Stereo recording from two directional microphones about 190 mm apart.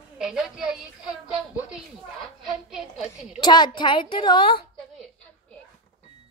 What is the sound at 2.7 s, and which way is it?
Speech, 5° right (ahead or behind).